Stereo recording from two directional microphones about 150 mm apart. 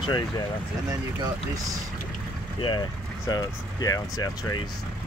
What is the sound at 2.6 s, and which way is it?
Speech, 30° left (ahead or behind).